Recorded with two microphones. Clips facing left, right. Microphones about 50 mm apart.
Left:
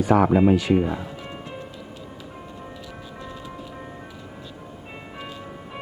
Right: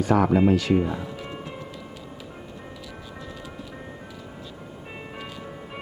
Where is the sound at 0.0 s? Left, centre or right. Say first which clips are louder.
Left 2 dB; centre.